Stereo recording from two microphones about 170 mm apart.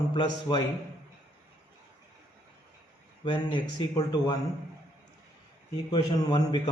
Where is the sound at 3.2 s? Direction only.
30° left (ahead or behind).